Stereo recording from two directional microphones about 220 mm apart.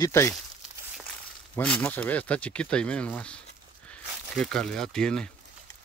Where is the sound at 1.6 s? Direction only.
5° left (ahead or behind).